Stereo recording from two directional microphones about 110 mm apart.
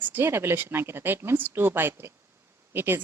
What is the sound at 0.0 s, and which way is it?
A woman's voice, 20° right (ahead or behind).